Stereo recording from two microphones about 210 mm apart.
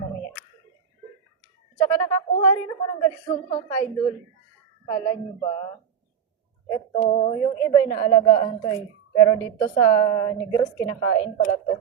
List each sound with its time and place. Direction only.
1.8 s a woman's voice: 15° left (ahead or behind)
6.9 s a woman's voice: 30° left (ahead or behind)